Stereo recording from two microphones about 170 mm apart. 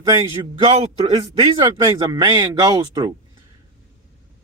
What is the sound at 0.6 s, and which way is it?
A man's voice, 35° right (ahead or behind).